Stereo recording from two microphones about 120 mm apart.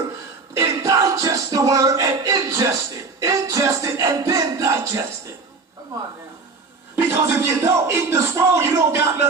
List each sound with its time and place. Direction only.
0.6 s music: 25° right (ahead or behind)
6.9 s a man's voice: 25° right (ahead or behind)